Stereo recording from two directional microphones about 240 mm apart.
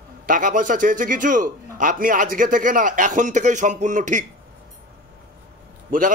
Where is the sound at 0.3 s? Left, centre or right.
Right.